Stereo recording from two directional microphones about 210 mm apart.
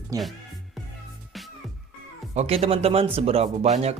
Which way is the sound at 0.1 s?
15° right (ahead or behind).